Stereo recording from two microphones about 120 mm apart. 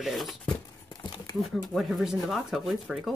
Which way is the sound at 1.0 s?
40° left (ahead or behind).